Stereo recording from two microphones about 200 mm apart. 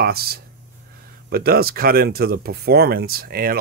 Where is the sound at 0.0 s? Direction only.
50° right (ahead or behind).